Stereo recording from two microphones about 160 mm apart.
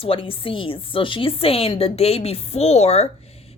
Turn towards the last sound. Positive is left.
turn(degrees=40)  # may be behind; listen again after turning